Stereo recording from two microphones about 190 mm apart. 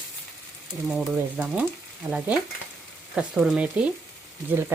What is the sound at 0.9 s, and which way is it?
Speech, 5° right (ahead or behind).